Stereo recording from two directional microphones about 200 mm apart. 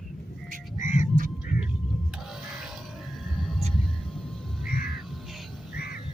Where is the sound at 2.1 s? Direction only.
Centre (ahead or behind).